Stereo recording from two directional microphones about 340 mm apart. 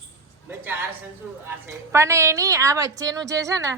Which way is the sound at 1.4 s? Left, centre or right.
Centre.